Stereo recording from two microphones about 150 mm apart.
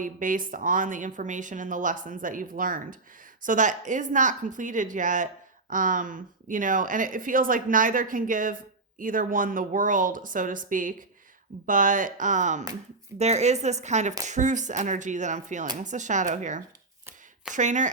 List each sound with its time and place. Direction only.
0.0 s speech: 65° right (ahead or behind)